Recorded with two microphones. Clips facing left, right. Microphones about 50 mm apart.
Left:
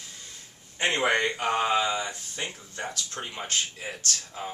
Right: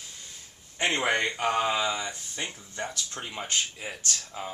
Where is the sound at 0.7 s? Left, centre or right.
Centre.